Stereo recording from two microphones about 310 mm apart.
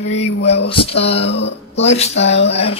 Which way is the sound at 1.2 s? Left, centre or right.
Left.